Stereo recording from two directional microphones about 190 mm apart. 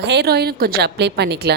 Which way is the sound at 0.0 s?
60° right (ahead or behind).